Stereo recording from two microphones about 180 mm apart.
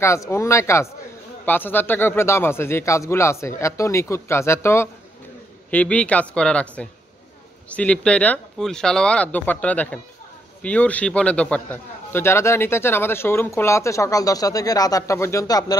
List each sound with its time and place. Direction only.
0.0 s a man's voice: 15° left (ahead or behind)